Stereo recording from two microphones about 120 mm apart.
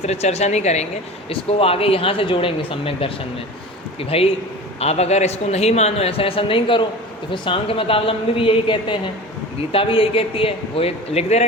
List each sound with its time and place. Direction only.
0.0 s a woman's voice: 65° left (ahead or behind)
1.3 s speech: 55° left (ahead or behind)
4.1 s speech: 55° left (ahead or behind)